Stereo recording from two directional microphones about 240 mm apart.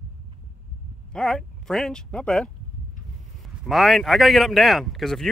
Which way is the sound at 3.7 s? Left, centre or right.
Centre.